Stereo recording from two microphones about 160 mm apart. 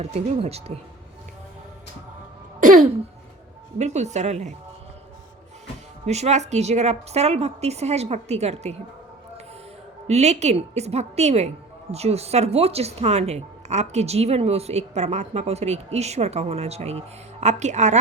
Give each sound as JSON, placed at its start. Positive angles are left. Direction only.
{"t": 0.0, "sound": "speech", "side_deg": -40}
{"t": 3.8, "sound": "a woman's voice", "side_deg": -45}
{"t": 6.1, "sound": "a woman's voice", "side_deg": -45}
{"t": 10.1, "sound": "a woman's voice", "side_deg": -45}